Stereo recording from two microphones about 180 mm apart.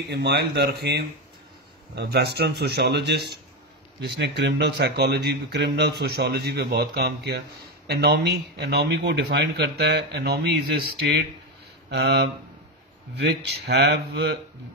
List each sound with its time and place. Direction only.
0.1 s a man's voice: 65° right (ahead or behind)
11.9 s speech: 65° right (ahead or behind)